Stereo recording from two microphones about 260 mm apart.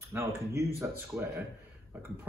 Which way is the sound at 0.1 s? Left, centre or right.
Centre.